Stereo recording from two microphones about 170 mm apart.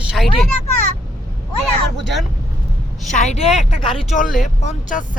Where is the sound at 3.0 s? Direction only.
45° left (ahead or behind).